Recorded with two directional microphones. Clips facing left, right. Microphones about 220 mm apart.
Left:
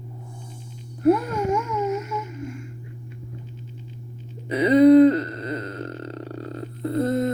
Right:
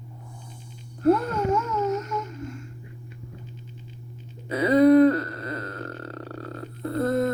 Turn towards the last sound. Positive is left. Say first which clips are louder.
# left 2 dB
turn(degrees=20)  # may be behind; listen again after turning